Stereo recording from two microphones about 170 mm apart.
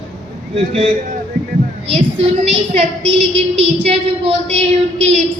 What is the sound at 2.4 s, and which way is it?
A woman's voice, 35° right (ahead or behind).